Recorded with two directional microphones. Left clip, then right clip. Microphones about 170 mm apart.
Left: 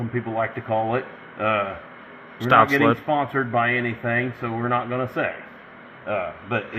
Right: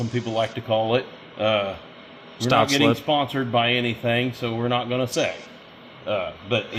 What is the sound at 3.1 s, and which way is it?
Speech, 30° right (ahead or behind).